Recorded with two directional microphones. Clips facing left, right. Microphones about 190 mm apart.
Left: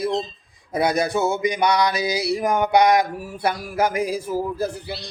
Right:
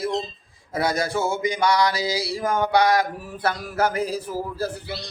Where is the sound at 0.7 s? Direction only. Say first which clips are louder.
Left 3 dB; 20° left (ahead or behind).